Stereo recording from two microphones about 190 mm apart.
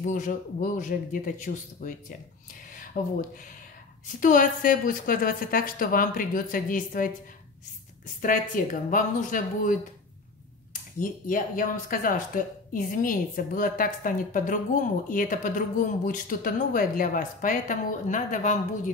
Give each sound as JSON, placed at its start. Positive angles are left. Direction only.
{"t": 0.0, "sound": "speech", "side_deg": 45}
{"t": 2.7, "sound": "a sound", "side_deg": 45}
{"t": 4.2, "sound": "speech", "side_deg": 45}
{"t": 8.6, "sound": "speech", "side_deg": 45}